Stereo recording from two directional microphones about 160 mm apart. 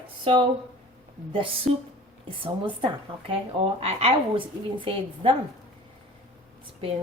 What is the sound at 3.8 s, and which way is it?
A woman's voice, 40° right (ahead or behind).